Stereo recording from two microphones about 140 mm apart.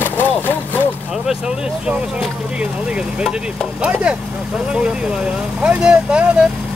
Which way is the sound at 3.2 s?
5° right (ahead or behind).